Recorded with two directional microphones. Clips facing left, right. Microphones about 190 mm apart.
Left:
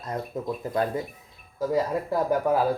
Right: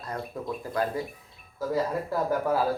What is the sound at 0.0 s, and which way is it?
Speech, 20° left (ahead or behind).